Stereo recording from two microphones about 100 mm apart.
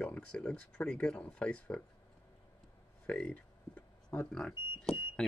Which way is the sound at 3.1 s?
10° left (ahead or behind).